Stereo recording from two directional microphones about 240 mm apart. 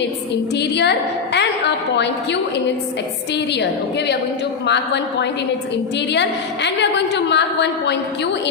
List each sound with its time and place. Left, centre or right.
0.5 s a woman's voice: left